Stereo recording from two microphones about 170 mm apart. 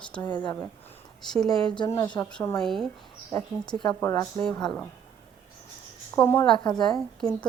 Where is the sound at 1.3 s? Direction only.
Centre (ahead or behind).